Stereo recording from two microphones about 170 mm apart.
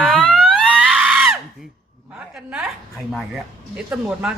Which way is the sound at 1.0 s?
10° right (ahead or behind).